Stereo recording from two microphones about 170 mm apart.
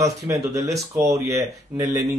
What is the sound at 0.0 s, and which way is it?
Speech, 20° right (ahead or behind).